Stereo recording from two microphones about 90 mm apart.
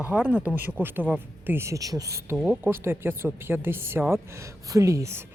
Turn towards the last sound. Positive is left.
turn(degrees=-35)  # may be behind; listen again after turning